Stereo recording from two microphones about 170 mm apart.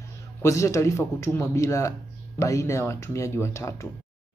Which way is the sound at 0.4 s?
15° left (ahead or behind).